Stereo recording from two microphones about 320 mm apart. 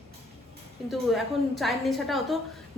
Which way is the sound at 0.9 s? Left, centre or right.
Centre.